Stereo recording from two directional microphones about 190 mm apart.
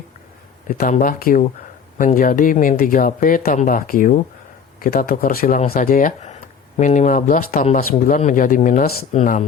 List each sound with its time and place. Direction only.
0.7 s speech: 45° left (ahead or behind)